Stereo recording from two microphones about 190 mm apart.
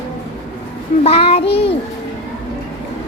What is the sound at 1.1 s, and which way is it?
Child singing, 30° left (ahead or behind).